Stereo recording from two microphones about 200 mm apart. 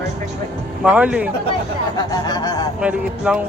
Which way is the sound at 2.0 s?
20° left (ahead or behind).